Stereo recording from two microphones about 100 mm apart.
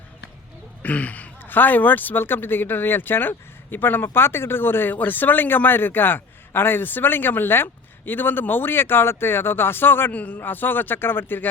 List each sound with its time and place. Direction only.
0.8 s speech: 15° left (ahead or behind)